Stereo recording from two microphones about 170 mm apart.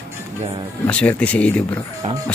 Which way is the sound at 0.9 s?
5° left (ahead or behind).